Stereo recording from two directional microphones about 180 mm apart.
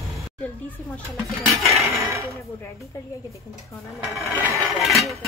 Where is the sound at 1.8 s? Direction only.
15° right (ahead or behind).